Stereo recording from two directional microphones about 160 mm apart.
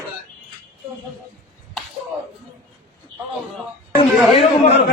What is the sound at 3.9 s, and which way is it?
Speech, 40° left (ahead or behind).